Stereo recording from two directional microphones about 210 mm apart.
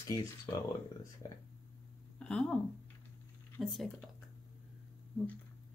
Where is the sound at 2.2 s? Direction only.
5° left (ahead or behind).